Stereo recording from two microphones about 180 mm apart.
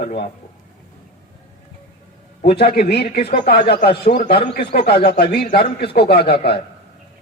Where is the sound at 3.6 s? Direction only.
65° left (ahead or behind).